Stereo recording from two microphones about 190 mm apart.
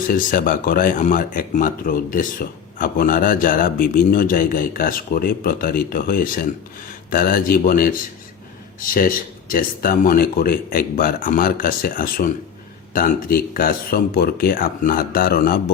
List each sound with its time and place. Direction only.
0.1 s speech: 45° left (ahead or behind)